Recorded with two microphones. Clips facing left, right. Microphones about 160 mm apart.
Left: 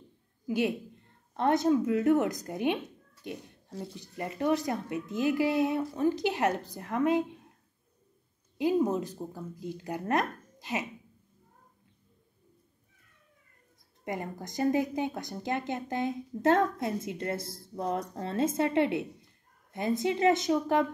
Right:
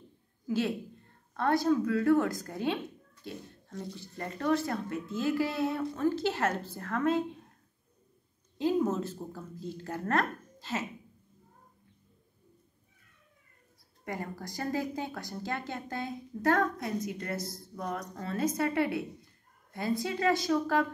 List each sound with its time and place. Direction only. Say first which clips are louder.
0.5 s a man's voice: left 2 dB; 15° left (ahead or behind)
8.5 s speech: left 2 dB; 15° left (ahead or behind)
14.0 s speech: left 2 dB; 20° left (ahead or behind)